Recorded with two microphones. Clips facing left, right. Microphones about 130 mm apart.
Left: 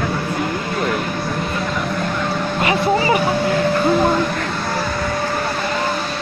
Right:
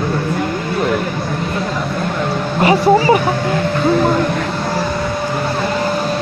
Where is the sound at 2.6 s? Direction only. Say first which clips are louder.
Right 6 dB; 35° right (ahead or behind).